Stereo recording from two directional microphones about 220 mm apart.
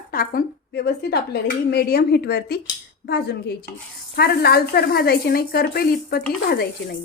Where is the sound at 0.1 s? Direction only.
40° left (ahead or behind).